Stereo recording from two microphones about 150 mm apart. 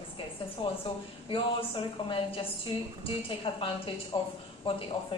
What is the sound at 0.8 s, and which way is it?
Speech, 35° left (ahead or behind).